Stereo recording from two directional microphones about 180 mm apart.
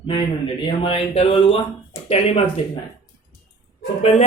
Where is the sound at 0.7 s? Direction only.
30° left (ahead or behind).